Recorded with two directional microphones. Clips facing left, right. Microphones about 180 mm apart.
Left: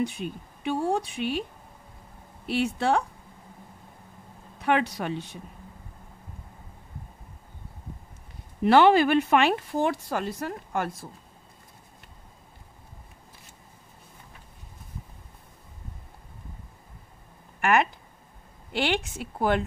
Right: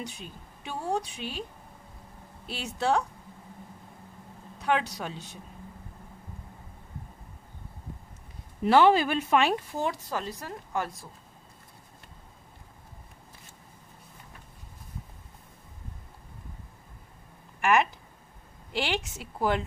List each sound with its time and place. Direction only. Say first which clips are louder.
0.0 s speech: left 11 dB; 60° left (ahead or behind)
2.4 s speech: left 5 dB; 60° left (ahead or behind)
4.6 s speech: left 3 dB; 55° left (ahead or behind)
8.6 s speech: left 3 dB; 65° left (ahead or behind)
17.6 s a sound: left 1 dB; 55° left (ahead or behind)
18.7 s speech: left 4 dB; 60° left (ahead or behind)